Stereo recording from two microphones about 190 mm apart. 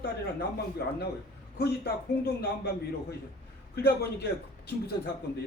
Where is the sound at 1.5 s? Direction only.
55° left (ahead or behind).